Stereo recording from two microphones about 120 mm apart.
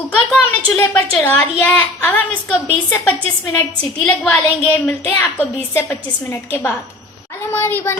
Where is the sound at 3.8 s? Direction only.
10° left (ahead or behind).